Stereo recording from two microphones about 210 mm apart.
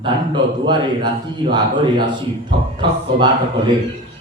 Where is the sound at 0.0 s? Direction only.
20° right (ahead or behind).